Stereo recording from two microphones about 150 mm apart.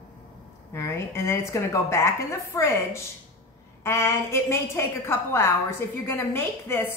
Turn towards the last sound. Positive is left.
turn(degrees=15)  # may be behind; listen again after turning